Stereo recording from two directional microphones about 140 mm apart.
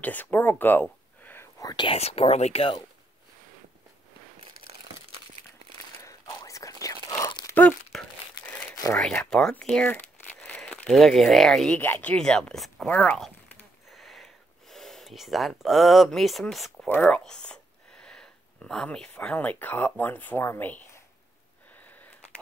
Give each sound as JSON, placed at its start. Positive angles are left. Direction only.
{"t": 0.0, "sound": "speech", "side_deg": 10}
{"t": 1.2, "sound": "whispering", "side_deg": 15}
{"t": 1.9, "sound": "speech", "side_deg": 45}
{"t": 6.0, "sound": "a sound", "side_deg": 25}
{"t": 7.4, "sound": "crumpling", "side_deg": 10}
{"t": 8.9, "sound": "speech", "side_deg": 5}
{"t": 12.8, "sound": "speech", "side_deg": 15}
{"t": 13.8, "sound": "sniff", "side_deg": 0}
{"t": 14.7, "sound": "speech", "side_deg": 0}